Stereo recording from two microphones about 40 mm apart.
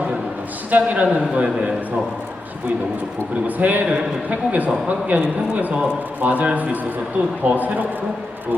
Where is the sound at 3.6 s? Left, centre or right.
Right.